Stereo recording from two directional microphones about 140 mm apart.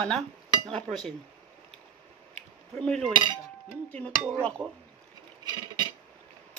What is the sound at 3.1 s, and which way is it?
Speech, 30° right (ahead or behind).